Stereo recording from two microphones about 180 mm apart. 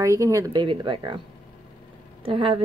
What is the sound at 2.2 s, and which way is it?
Speech, 30° right (ahead or behind).